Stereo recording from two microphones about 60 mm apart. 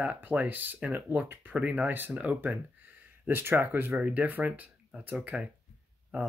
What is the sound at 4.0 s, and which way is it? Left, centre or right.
Speech, right.